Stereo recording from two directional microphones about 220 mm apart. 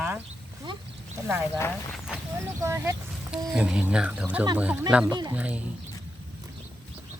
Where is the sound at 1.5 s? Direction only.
10° left (ahead or behind).